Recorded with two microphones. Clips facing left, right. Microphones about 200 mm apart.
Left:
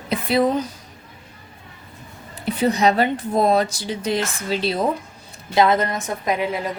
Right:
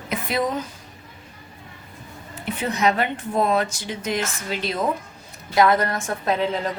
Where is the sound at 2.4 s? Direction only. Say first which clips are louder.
Left 4 dB; 35° left (ahead or behind).